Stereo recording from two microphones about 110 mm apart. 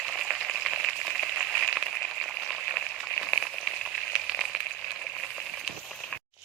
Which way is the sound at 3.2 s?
5° right (ahead or behind).